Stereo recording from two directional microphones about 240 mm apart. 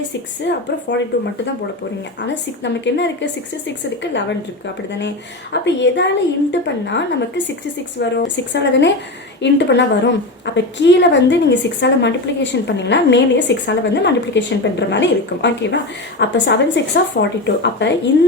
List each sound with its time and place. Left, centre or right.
0.4 s a woman's voice: left
2.2 s a woman's voice: left
5.6 s a woman's voice: left